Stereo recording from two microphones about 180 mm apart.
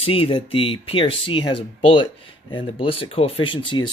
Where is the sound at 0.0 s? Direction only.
30° left (ahead or behind).